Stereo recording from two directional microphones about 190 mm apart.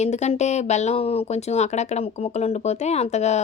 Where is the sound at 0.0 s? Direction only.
35° left (ahead or behind).